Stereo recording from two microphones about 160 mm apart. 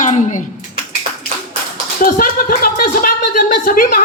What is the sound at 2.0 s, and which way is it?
A man's voice, 60° left (ahead or behind).